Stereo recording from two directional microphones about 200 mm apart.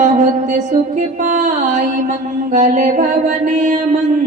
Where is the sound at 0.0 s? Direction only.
40° right (ahead or behind).